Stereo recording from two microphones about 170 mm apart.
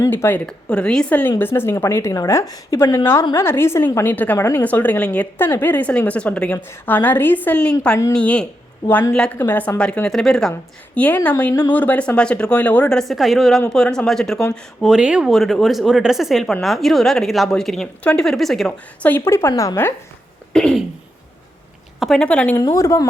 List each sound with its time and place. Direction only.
0.0 s a woman's voice: 15° left (ahead or behind)
20.5 s speech: 5° left (ahead or behind)
22.0 s speech: 5° left (ahead or behind)
22.5 s a woman's voice: 20° left (ahead or behind)